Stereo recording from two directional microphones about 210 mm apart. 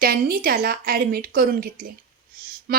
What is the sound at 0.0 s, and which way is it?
A woman's voice, 45° right (ahead or behind).